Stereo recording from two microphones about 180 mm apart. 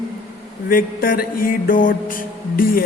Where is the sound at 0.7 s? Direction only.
50° left (ahead or behind).